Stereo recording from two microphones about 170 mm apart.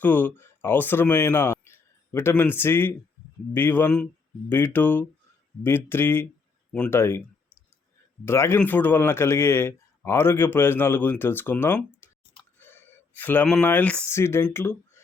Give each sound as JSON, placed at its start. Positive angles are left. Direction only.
{"t": 0.0, "sound": "speech", "side_deg": 10}
{"t": 8.2, "sound": "speech", "side_deg": 15}